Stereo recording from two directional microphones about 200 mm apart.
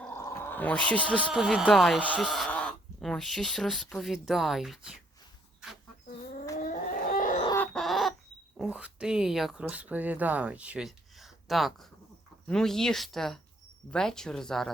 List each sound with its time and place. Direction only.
0.0 s speech: 10° left (ahead or behind)
6.6 s a sound: 40° left (ahead or behind)
7.5 s chicken: 5° left (ahead or behind)
8.5 s speech: 5° right (ahead or behind)